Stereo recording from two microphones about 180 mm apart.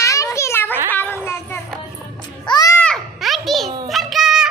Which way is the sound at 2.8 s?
5° left (ahead or behind).